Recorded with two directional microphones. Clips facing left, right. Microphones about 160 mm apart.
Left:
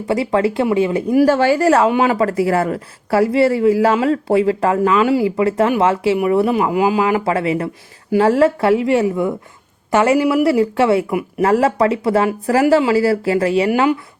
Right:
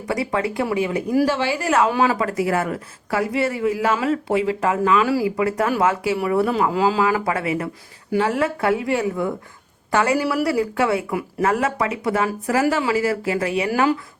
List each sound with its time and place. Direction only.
0.1 s speech: 25° left (ahead or behind)
1.2 s a woman's voice: 45° left (ahead or behind)
1.9 s speech: 25° left (ahead or behind)
11.1 s speech: 15° left (ahead or behind)
11.4 s speech: 30° left (ahead or behind)